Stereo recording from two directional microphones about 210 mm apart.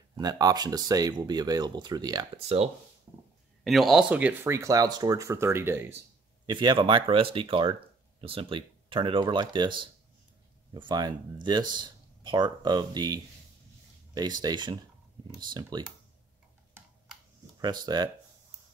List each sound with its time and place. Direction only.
0.2 s speech: 20° right (ahead or behind)
3.1 s a sound: 15° right (ahead or behind)
3.6 s speech: centre (ahead or behind)
6.4 s speech: 20° right (ahead or behind)
17.6 s speech: 20° right (ahead or behind)